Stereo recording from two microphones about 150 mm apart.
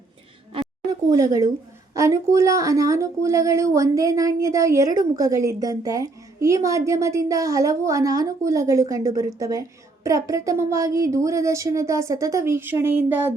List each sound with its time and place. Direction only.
1.1 s speech: 25° right (ahead or behind)